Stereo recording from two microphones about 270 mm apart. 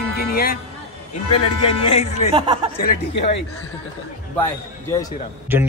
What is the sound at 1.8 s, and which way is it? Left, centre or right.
Music, left.